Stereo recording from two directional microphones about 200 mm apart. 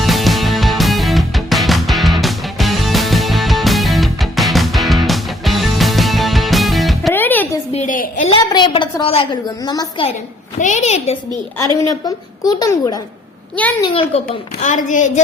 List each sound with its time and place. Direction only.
0.0 s music: centre (ahead or behind)
7.7 s a sound: 35° left (ahead or behind)
8.5 s a woman's voice: 25° left (ahead or behind)
10.6 s a woman's voice: 35° left (ahead or behind)
11.8 s a woman's voice: 15° left (ahead or behind)
13.8 s a woman's voice: 30° left (ahead or behind)
14.6 s a woman's voice: 40° left (ahead or behind)